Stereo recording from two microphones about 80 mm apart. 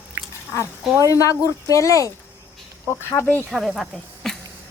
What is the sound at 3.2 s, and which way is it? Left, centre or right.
Speech, left.